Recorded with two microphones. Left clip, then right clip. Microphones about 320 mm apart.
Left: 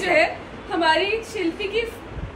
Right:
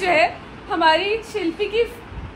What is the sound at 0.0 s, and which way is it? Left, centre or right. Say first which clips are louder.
A woman's voice: right 1 dB; centre.